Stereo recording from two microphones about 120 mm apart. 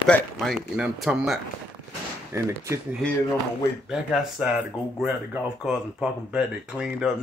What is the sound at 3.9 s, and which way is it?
Speech, 5° right (ahead or behind).